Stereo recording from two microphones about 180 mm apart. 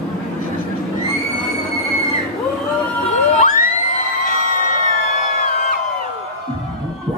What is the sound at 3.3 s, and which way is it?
Children shouting, 45° left (ahead or behind).